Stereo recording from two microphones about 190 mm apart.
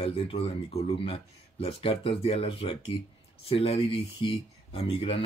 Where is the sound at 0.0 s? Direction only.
30° left (ahead or behind).